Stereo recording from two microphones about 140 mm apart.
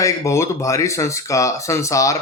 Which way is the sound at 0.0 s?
20° left (ahead or behind).